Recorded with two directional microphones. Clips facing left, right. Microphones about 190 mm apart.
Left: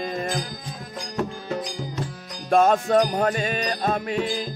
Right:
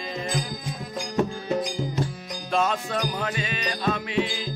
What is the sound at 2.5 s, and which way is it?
Music, 50° left (ahead or behind).